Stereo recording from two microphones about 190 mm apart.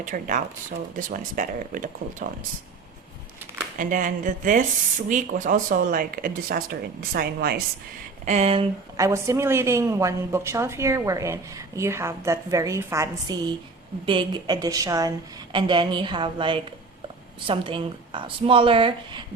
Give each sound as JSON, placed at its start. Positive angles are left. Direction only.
{"t": 0.0, "sound": "speech", "side_deg": -45}
{"t": 3.8, "sound": "speech", "side_deg": -45}
{"t": 8.2, "sound": "speech", "side_deg": -35}
{"t": 9.0, "sound": "a woman's voice", "side_deg": -15}